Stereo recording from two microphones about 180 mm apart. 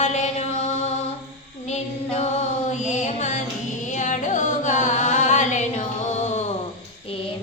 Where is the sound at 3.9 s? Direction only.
45° left (ahead or behind).